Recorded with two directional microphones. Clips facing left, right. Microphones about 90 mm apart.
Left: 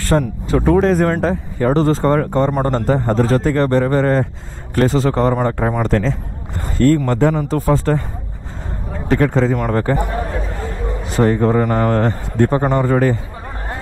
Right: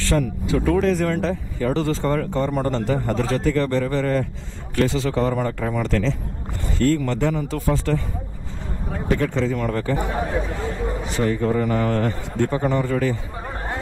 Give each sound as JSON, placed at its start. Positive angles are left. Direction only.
{"t": 0.0, "sound": "speech", "side_deg": 45}
{"t": 9.1, "sound": "speech", "side_deg": 50}
{"t": 9.9, "sound": "speech", "side_deg": 0}
{"t": 11.1, "sound": "speech", "side_deg": 45}